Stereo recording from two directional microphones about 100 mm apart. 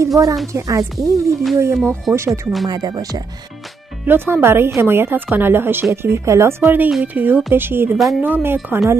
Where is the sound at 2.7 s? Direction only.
40° right (ahead or behind).